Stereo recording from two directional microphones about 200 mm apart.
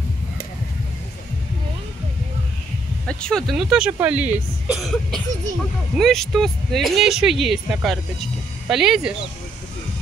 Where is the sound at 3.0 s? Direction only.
5° left (ahead or behind).